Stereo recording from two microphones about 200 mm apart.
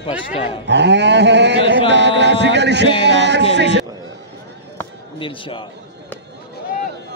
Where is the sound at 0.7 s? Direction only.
60° right (ahead or behind).